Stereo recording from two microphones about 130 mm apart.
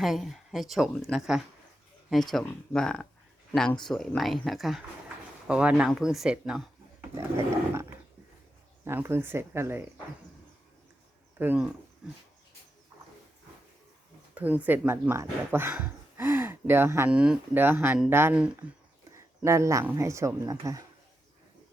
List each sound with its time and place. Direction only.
0.0 s speech: centre (ahead or behind)
7.2 s speech: 20° right (ahead or behind)
11.3 s speech: 15° right (ahead or behind)
12.0 s speech: 5° right (ahead or behind)
14.3 s speech: 10° right (ahead or behind)
19.5 s speech: 20° right (ahead or behind)